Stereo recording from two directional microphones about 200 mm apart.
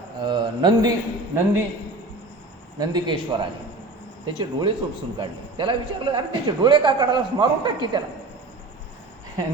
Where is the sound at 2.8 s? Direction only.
20° right (ahead or behind).